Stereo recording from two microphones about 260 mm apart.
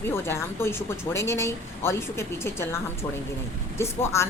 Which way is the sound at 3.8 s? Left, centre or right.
Centre.